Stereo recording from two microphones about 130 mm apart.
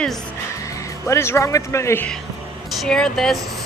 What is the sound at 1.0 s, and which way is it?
A man's voice, 20° left (ahead or behind).